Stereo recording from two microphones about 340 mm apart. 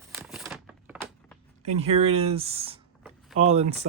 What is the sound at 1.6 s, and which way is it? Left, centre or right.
Speech, centre.